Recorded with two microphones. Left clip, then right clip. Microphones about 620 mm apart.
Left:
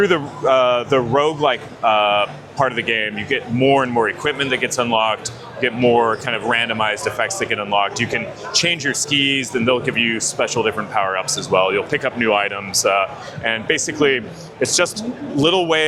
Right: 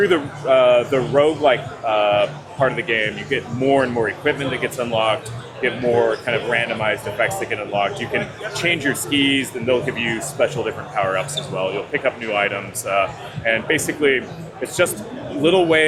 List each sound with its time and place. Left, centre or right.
0.0 s a man's voice: left